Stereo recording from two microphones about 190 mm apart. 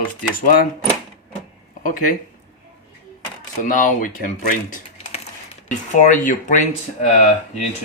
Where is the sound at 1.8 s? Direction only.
45° left (ahead or behind).